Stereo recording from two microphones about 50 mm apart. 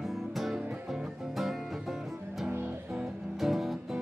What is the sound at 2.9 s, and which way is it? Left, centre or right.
Music, centre.